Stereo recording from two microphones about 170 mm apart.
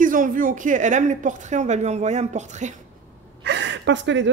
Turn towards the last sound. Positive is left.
turn(degrees=-90)